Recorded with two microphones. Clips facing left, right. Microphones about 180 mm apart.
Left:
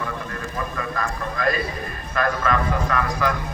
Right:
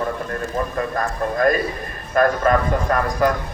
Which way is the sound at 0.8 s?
45° right (ahead or behind).